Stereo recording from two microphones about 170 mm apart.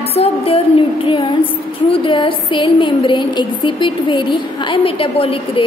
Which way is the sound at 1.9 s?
30° left (ahead or behind).